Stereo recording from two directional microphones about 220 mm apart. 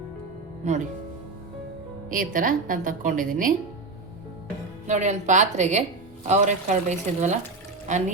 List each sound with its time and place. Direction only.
2.0 s a woman's voice: 40° right (ahead or behind)
4.9 s a woman's voice: 30° right (ahead or behind)